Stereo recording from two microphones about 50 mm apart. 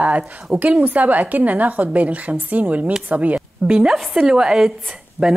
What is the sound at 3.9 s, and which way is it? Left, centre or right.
Speech, centre.